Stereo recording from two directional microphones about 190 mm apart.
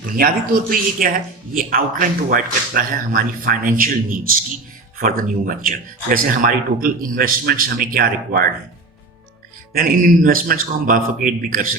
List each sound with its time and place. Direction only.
0.2 s speech: 50° right (ahead or behind)
9.7 s speech: 50° right (ahead or behind)